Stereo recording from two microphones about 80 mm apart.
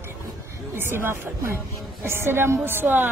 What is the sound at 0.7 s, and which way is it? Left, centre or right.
A woman's voice, right.